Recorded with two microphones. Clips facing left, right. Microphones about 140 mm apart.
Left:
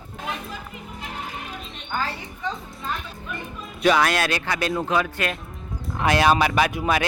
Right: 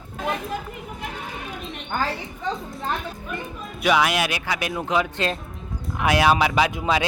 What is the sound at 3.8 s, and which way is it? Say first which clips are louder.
Speech: left 1 dB; 10° right (ahead or behind).